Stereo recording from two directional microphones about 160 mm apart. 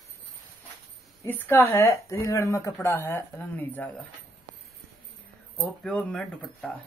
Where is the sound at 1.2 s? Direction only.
15° left (ahead or behind).